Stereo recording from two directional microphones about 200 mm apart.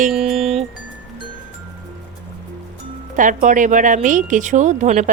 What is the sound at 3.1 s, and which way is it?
Speech, 40° right (ahead or behind).